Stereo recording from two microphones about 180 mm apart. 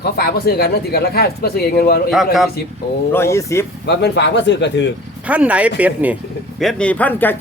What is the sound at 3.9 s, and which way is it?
Speech, 70° left (ahead or behind).